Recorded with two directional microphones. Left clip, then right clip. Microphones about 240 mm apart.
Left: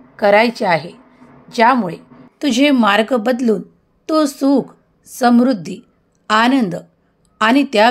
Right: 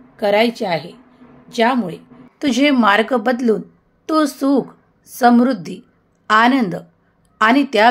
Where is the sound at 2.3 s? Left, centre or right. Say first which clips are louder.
Left 1 dB; left.